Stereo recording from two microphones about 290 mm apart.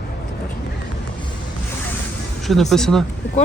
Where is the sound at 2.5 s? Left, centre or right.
Centre.